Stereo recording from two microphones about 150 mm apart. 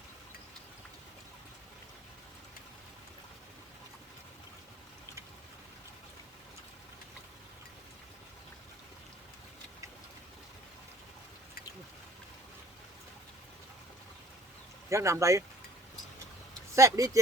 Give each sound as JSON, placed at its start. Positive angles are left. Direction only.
{"t": 14.8, "sound": "speech", "side_deg": -20}
{"t": 16.7, "sound": "speech", "side_deg": -20}